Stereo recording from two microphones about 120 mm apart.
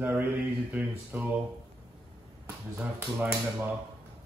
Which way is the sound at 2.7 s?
15° right (ahead or behind).